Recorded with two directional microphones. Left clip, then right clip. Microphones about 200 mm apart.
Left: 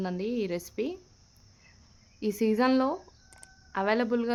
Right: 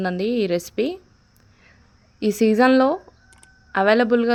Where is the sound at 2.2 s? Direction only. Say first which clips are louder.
Right 9 dB; 20° right (ahead or behind).